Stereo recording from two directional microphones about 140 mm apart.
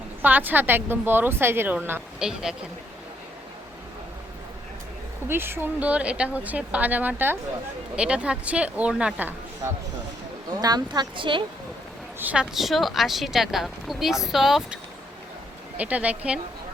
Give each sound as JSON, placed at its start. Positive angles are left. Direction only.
{"t": 0.2, "sound": "speech", "side_deg": -15}
{"t": 5.3, "sound": "speech", "side_deg": -15}
{"t": 10.6, "sound": "speech", "side_deg": -30}
{"t": 12.2, "sound": "speech", "side_deg": -5}
{"t": 15.8, "sound": "speech", "side_deg": -10}